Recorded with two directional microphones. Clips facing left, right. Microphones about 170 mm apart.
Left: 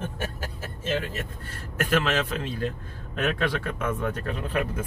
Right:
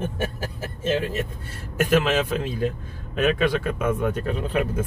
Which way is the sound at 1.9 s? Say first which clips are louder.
Right 4 dB; 15° right (ahead or behind).